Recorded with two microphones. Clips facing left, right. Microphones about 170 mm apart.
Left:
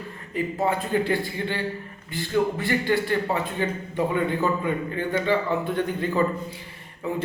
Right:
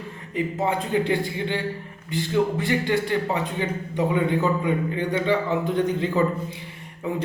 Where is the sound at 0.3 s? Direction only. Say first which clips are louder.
Even; 20° right (ahead or behind).